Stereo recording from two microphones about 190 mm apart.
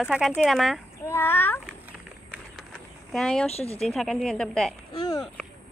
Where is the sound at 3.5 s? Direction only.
35° left (ahead or behind).